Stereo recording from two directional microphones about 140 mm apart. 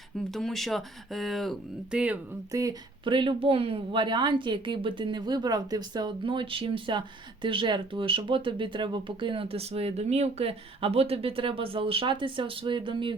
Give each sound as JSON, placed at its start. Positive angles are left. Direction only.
{"t": 0.3, "sound": "speech", "side_deg": 0}
{"t": 2.5, "sound": "speech", "side_deg": -25}
{"t": 3.0, "sound": "speech", "side_deg": -35}